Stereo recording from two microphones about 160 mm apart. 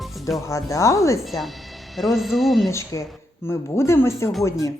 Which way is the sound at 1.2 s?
Centre (ahead or behind).